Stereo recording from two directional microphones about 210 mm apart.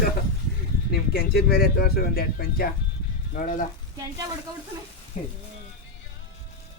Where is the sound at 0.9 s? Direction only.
45° left (ahead or behind).